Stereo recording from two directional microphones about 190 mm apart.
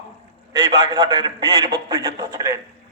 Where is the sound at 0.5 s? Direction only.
20° right (ahead or behind).